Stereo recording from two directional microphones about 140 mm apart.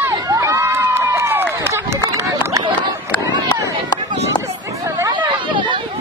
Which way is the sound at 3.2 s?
25° right (ahead or behind).